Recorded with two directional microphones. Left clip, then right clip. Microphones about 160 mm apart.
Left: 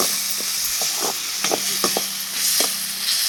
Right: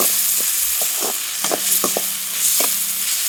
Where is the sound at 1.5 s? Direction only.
20° right (ahead or behind).